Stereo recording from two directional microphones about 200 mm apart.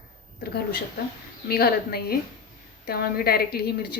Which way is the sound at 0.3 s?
50° left (ahead or behind).